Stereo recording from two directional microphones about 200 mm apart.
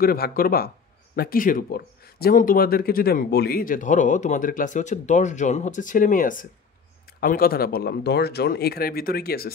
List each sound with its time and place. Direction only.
0.0 s speech: 50° left (ahead or behind)